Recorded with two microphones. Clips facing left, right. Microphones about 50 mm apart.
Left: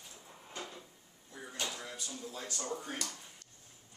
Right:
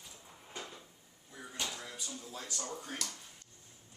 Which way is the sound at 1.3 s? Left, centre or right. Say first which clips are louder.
Left 1 dB; centre.